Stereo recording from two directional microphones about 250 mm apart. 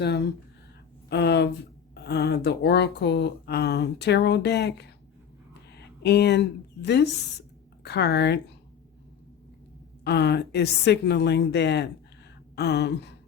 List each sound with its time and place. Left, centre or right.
0.0 s speech: left
5.7 s a sound: left
6.8 s speech: left
10.0 s speech: left